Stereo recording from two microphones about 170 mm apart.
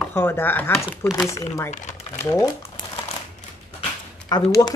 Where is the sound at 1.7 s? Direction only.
45° left (ahead or behind).